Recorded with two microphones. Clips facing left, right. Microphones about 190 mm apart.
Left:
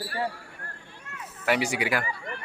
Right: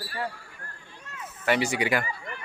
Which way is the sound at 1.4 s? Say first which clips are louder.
Right 1 dB; 10° left (ahead or behind).